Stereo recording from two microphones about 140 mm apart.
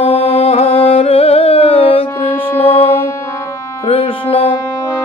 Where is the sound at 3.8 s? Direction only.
40° left (ahead or behind).